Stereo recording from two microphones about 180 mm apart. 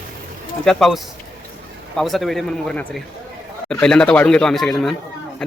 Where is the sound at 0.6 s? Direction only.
Centre (ahead or behind).